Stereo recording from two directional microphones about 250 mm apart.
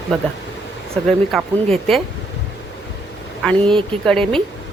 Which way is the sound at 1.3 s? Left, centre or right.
Centre.